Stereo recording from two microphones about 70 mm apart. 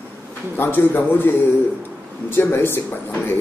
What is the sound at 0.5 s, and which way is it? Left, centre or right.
A man's voice, left.